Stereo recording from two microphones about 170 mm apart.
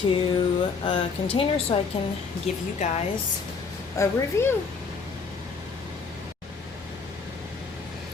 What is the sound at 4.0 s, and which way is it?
Speech, 15° left (ahead or behind).